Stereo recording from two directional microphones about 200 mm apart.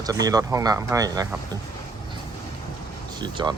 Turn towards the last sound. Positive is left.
turn(degrees=-20)  # may be behind; listen again after turning